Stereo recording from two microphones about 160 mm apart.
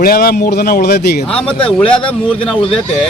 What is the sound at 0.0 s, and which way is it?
A man's voice, 70° left (ahead or behind).